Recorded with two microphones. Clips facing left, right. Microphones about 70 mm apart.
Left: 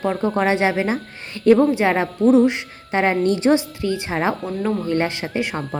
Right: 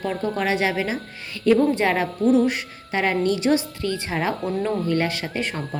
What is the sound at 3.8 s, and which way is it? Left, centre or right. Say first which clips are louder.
Speech: left 3 dB; centre.